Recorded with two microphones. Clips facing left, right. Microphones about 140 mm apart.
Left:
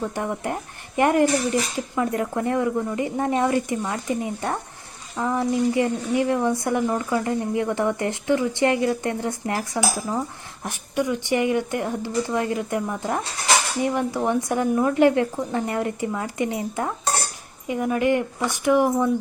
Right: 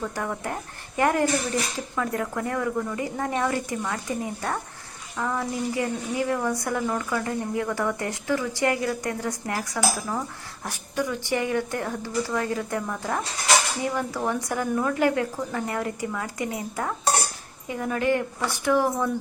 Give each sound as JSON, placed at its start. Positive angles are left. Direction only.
{"t": 0.0, "sound": "speech", "side_deg": 20}